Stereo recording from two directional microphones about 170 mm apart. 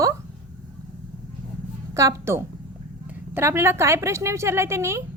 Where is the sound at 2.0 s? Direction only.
20° right (ahead or behind).